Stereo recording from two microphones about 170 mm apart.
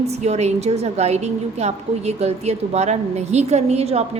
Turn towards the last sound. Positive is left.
turn(degrees=-40)  # may be behind; listen again after turning